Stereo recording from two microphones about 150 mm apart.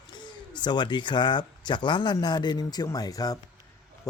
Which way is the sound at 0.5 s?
30° left (ahead or behind).